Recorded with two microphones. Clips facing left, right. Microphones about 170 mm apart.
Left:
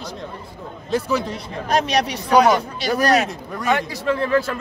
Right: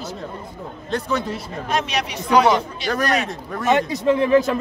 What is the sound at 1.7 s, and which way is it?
Speech, 40° left (ahead or behind).